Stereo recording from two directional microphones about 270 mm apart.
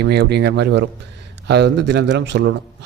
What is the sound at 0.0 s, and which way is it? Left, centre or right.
Speech, right.